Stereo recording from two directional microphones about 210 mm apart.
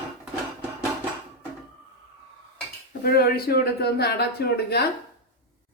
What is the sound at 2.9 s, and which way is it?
Speech, 45° left (ahead or behind).